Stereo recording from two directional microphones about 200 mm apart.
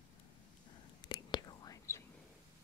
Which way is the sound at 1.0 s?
20° left (ahead or behind).